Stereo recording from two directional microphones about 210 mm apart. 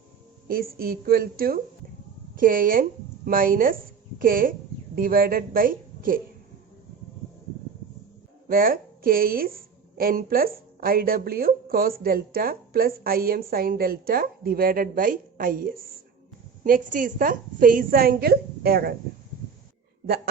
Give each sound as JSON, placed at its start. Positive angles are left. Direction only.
{"t": 0.4, "sound": "a woman's voice", "side_deg": -45}
{"t": 8.4, "sound": "a woman's voice", "side_deg": -45}